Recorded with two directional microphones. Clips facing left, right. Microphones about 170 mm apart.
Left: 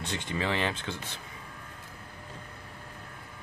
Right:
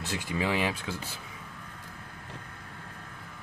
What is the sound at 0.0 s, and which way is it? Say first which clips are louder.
Speech: right 1 dB; 5° right (ahead or behind).